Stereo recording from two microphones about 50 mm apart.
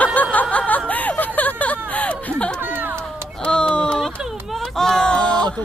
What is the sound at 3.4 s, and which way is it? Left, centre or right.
Speech, centre.